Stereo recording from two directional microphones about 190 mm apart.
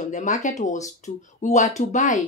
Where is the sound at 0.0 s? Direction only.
40° left (ahead or behind).